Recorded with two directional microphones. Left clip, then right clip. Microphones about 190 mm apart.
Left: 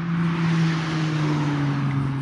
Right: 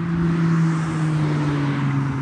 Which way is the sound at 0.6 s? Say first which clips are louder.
Right 1 dB; 40° left (ahead or behind).